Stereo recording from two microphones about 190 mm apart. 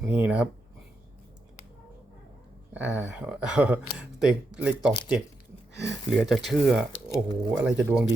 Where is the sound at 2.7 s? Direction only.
10° right (ahead or behind).